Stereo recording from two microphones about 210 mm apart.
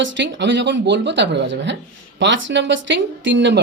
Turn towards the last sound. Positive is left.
turn(degrees=-60)  # may be behind; listen again after turning